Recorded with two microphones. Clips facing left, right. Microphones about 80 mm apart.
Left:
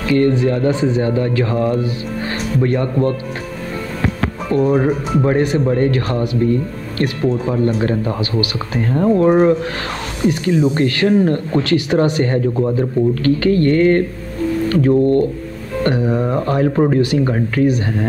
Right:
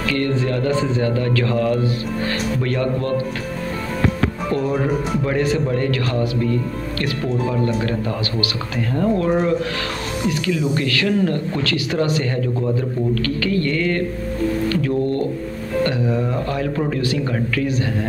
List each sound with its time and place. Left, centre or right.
0.1 s speech: centre
4.7 s speech: left
5.4 s speech: centre
5.8 s speech: left